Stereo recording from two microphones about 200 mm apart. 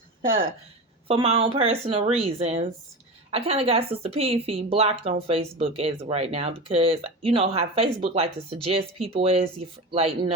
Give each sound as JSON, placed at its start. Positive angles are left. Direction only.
{"t": 1.0, "sound": "a woman's voice", "side_deg": -30}